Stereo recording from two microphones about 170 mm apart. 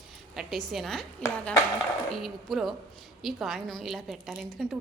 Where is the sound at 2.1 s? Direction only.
Centre (ahead or behind).